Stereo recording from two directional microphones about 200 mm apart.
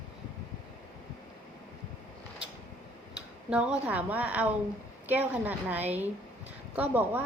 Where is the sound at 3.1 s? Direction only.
5° right (ahead or behind).